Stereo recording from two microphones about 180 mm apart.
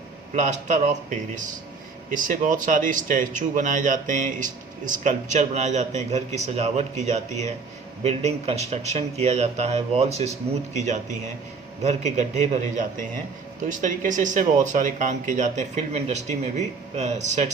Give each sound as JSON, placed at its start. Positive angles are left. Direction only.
{"t": 0.3, "sound": "speech", "side_deg": -40}
{"t": 11.8, "sound": "speech", "side_deg": -40}